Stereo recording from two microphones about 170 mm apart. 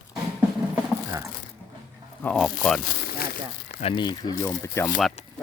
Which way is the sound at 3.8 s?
30° left (ahead or behind).